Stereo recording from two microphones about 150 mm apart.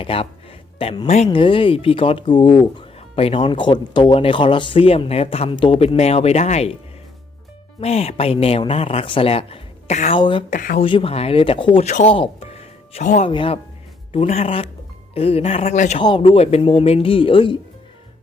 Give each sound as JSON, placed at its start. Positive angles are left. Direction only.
{"t": 0.0, "sound": "speech", "side_deg": 40}
{"t": 1.3, "sound": "speech", "side_deg": 35}
{"t": 7.8, "sound": "speech", "side_deg": 45}
{"t": 10.2, "sound": "speech", "side_deg": 30}
{"t": 10.5, "sound": "speech", "side_deg": 60}
{"t": 10.8, "sound": "speech", "side_deg": 35}
{"t": 11.9, "sound": "speech", "side_deg": 50}
{"t": 12.1, "sound": "music", "side_deg": 40}
{"t": 13.2, "sound": "speech", "side_deg": 35}
{"t": 16.0, "sound": "speech", "side_deg": 35}